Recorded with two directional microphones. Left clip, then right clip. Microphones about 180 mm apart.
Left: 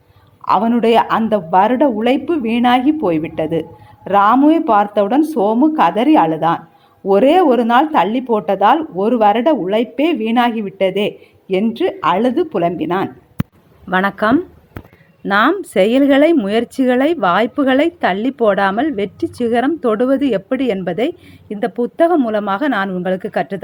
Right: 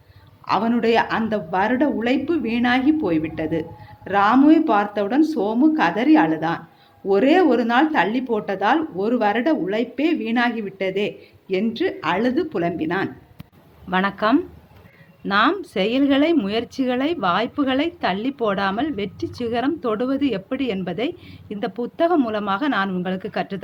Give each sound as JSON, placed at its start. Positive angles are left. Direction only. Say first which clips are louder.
{"t": 0.4, "sound": "speech", "louder": "left 6 dB", "side_deg": 30}